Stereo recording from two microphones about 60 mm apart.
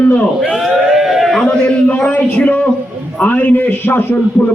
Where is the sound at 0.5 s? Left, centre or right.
Centre.